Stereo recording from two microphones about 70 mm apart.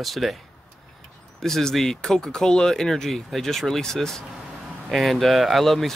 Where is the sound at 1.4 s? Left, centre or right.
Centre.